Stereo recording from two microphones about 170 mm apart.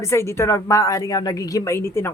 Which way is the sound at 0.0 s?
15° left (ahead or behind).